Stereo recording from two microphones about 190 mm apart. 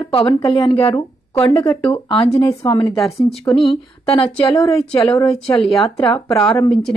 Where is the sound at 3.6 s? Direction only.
30° left (ahead or behind).